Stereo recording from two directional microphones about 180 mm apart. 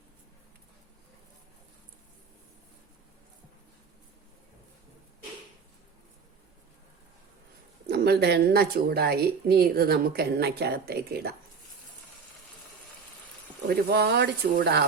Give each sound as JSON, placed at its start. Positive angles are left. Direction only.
{"t": 7.9, "sound": "speech", "side_deg": -65}
{"t": 13.9, "sound": "speech", "side_deg": -65}